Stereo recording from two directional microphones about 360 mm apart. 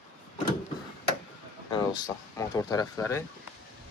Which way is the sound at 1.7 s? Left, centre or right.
Centre.